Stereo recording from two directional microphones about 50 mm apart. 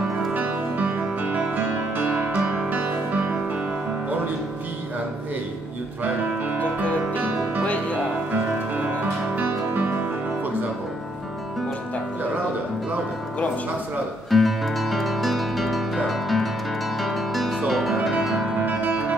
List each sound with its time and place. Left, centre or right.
0.3 s music: right
1.6 s music: right
7.6 s music: left
8.3 s music: right
14.3 s music: centre
18.7 s music: right